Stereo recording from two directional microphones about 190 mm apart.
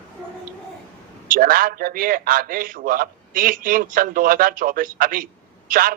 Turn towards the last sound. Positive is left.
turn(degrees=-50)  # may be behind; listen again after turning